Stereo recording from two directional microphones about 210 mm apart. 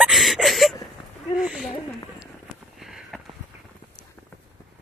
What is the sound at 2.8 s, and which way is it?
Sniff, centre (ahead or behind).